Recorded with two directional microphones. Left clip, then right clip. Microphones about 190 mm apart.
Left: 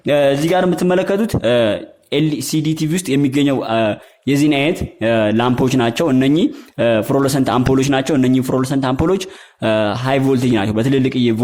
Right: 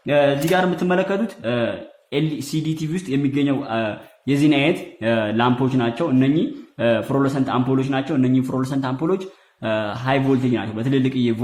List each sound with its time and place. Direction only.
0.0 s speech: 50° left (ahead or behind)
2.1 s speech: 40° left (ahead or behind)
6.8 s a man's voice: 35° left (ahead or behind)